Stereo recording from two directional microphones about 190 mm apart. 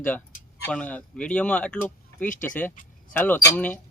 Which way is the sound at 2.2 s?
45° left (ahead or behind).